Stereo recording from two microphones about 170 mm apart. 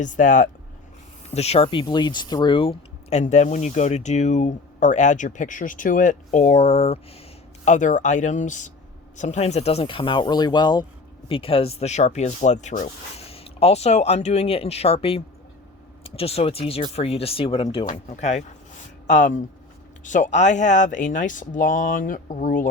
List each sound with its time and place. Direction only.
0.0 s speech: 50° left (ahead or behind)
1.3 s speech: 40° left (ahead or behind)